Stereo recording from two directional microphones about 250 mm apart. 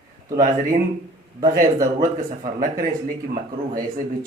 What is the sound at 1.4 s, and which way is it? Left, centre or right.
A man's voice, right.